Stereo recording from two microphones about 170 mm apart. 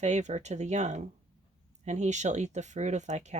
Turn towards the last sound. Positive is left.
turn(degrees=-40)  # may be behind; listen again after turning